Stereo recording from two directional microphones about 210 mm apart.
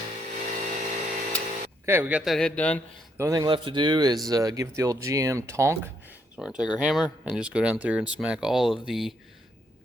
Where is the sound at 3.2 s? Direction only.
15° right (ahead or behind).